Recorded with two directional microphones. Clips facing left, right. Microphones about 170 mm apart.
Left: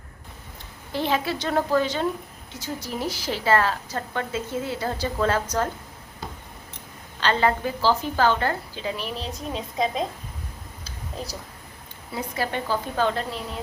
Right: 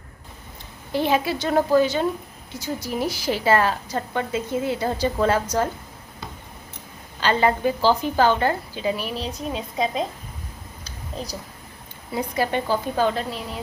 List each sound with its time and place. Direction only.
0.9 s a woman's voice: 10° right (ahead or behind)
7.2 s a woman's voice: 15° right (ahead or behind)
12.1 s a woman's voice: 20° right (ahead or behind)